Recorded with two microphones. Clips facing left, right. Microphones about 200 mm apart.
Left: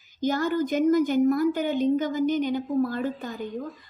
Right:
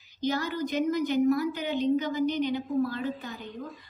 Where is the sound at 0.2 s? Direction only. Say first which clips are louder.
Left 5 dB; 50° left (ahead or behind).